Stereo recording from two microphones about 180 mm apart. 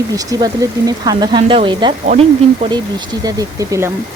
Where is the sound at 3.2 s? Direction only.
20° right (ahead or behind).